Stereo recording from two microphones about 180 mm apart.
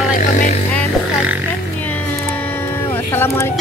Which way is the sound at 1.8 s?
10° left (ahead or behind).